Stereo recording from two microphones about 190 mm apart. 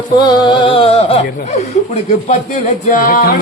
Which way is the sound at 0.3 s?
25° left (ahead or behind).